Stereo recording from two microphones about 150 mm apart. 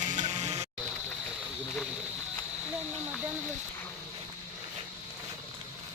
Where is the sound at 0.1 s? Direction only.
50° right (ahead or behind).